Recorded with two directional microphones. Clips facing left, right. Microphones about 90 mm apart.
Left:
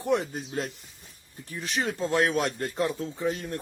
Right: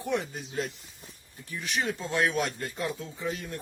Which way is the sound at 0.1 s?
40° left (ahead or behind).